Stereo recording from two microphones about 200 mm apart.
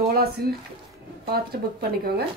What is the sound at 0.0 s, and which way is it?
A woman's voice, 50° right (ahead or behind).